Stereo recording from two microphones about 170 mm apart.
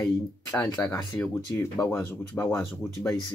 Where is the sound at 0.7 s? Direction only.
20° left (ahead or behind).